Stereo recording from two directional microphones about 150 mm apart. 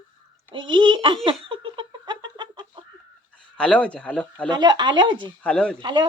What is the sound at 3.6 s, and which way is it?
Speech, 10° left (ahead or behind).